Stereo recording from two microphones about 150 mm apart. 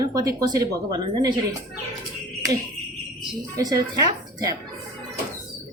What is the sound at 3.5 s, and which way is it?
A woman's voice, 25° right (ahead or behind).